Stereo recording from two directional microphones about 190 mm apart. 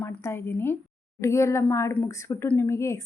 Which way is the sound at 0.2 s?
15° left (ahead or behind).